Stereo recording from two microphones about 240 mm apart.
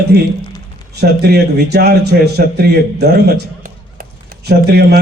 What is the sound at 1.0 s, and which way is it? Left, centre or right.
A man's voice, right.